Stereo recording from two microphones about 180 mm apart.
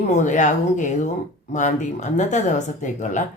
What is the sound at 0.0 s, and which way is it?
Speech, 40° left (ahead or behind).